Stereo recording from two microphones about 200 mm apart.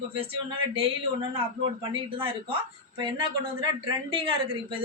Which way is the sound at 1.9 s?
25° right (ahead or behind).